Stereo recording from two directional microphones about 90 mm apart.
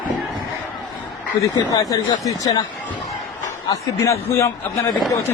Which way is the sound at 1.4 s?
40° left (ahead or behind).